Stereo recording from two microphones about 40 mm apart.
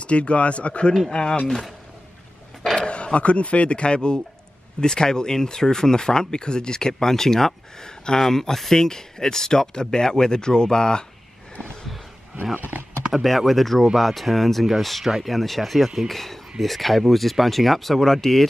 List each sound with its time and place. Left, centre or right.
0.0 s speech: left
2.8 s speech: left
13.1 s speech: centre